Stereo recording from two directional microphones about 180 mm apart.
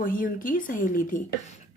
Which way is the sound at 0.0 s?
50° left (ahead or behind).